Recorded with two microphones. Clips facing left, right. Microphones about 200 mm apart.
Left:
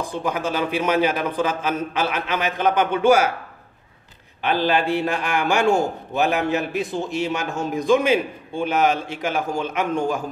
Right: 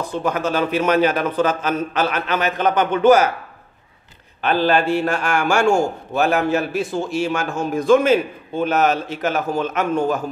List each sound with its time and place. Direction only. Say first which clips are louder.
0.0 s a man's voice: right 3 dB; 15° left (ahead or behind)
4.4 s a man's voice: right 3 dB; 15° left (ahead or behind)